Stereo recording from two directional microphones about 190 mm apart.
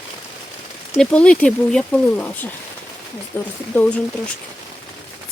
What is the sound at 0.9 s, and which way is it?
Speech, 5° left (ahead or behind).